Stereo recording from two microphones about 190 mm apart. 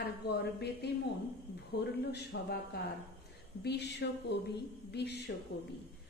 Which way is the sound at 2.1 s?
55° left (ahead or behind).